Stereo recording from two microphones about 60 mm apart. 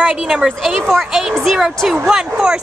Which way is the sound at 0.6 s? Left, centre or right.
Centre.